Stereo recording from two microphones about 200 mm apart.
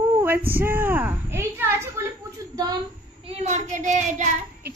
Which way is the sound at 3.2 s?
30° right (ahead or behind).